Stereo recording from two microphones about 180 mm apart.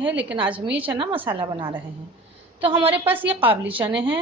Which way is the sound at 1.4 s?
30° right (ahead or behind).